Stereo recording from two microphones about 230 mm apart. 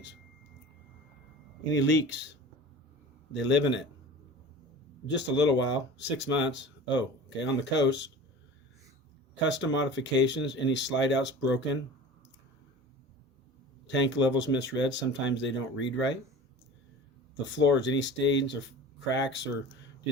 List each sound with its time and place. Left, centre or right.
1.7 s speech: left
3.3 s speech: left
5.1 s speech: left
9.5 s speech: left
13.8 s speech: left
17.4 s speech: left